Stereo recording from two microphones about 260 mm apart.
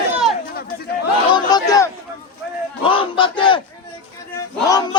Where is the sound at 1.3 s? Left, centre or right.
Centre.